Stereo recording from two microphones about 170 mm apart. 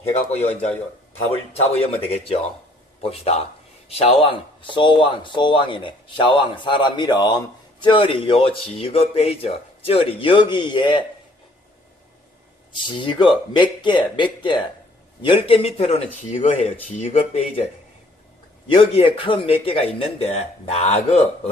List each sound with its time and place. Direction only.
0.0 s speech: 40° left (ahead or behind)
1.5 s speech: 35° left (ahead or behind)
12.7 s speech: 30° left (ahead or behind); by 17.4 s 45° left (ahead or behind)
18.9 s speech: 30° left (ahead or behind)